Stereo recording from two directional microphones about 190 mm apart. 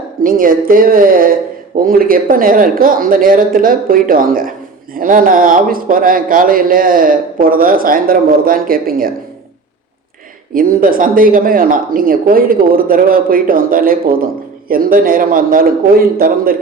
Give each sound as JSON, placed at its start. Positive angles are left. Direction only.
{"t": 0.2, "sound": "speech", "side_deg": -45}
{"t": 10.5, "sound": "speech", "side_deg": -50}